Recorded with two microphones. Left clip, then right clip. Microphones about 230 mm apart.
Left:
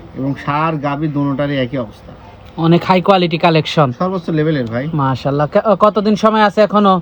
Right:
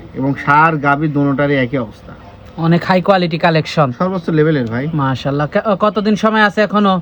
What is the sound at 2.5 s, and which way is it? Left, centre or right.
Speech, left.